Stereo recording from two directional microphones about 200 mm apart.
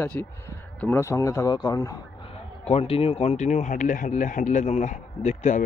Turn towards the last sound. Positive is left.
turn(degrees=35)  # may be behind; listen again after turning